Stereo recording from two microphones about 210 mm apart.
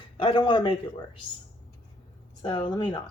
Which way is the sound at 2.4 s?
20° left (ahead or behind).